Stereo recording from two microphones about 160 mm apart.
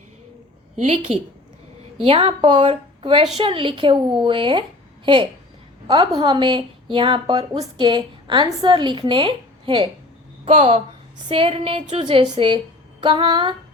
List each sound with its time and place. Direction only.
0.8 s a woman's voice: 40° right (ahead or behind)
6.1 s a woman's voice: 30° right (ahead or behind)